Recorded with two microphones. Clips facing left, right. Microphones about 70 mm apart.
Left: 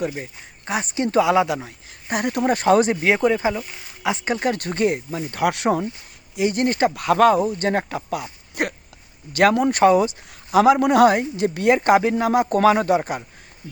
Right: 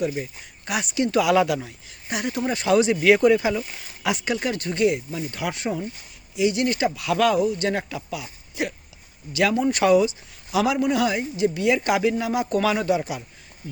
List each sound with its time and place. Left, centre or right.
0.0 s speech: left
2.0 s a woman's voice: left
3.0 s a woman's voice: left
6.3 s a woman's voice: left
9.8 s a woman's voice: left
10.8 s a woman's voice: left